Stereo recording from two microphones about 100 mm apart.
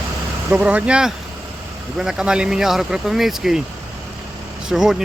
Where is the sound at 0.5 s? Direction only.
10° right (ahead or behind).